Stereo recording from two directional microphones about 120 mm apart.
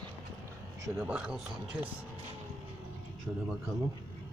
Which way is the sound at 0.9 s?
10° right (ahead or behind).